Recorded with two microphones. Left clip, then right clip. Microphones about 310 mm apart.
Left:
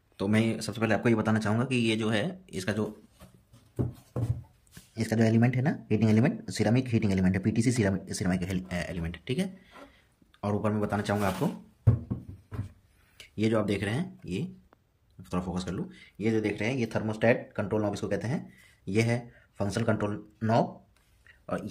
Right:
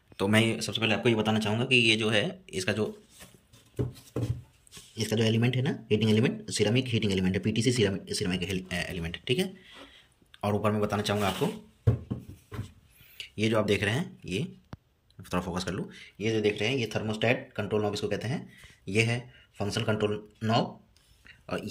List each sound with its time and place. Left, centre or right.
0.2 s speech: centre
4.9 s speech: centre
13.2 s speech: centre
21.3 s a sound: centre